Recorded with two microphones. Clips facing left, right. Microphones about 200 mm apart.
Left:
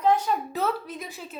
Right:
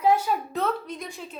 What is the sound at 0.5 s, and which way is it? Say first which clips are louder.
Speech: even; 5° left (ahead or behind).